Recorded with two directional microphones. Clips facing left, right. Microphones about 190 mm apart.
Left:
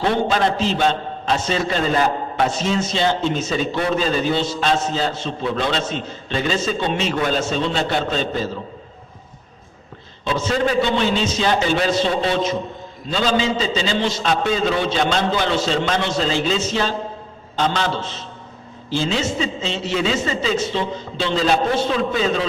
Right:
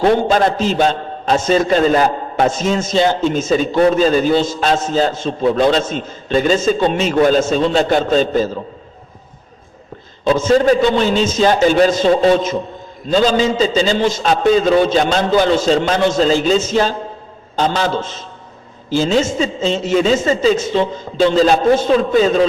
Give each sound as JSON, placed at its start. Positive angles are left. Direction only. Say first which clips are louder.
{"t": 0.0, "sound": "a man's voice", "louder": "right 6 dB", "side_deg": -45}
{"t": 10.2, "sound": "a man's voice", "louder": "right 8 dB", "side_deg": -45}